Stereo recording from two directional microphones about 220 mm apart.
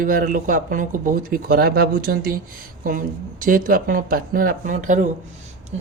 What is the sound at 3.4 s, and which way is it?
Speech, 40° right (ahead or behind).